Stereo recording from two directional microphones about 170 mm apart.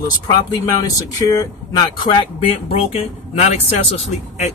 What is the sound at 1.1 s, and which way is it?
Speech, 20° left (ahead or behind).